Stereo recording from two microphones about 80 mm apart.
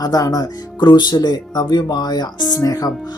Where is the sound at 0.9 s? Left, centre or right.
Left.